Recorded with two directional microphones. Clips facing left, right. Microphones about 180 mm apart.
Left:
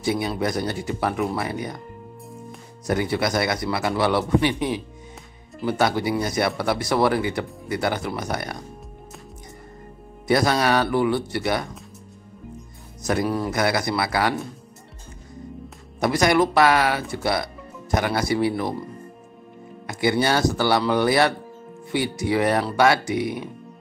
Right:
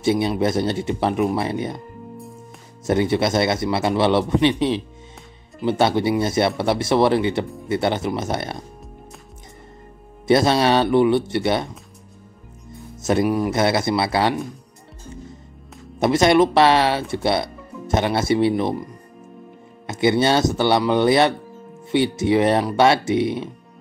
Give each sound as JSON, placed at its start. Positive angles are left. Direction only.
{"t": 0.0, "sound": "speech", "side_deg": -25}
{"t": 2.9, "sound": "speech", "side_deg": -25}
{"t": 10.2, "sound": "speech", "side_deg": -25}
{"t": 13.0, "sound": "speech", "side_deg": -25}
{"t": 16.0, "sound": "speech", "side_deg": -25}
{"t": 19.9, "sound": "speech", "side_deg": -25}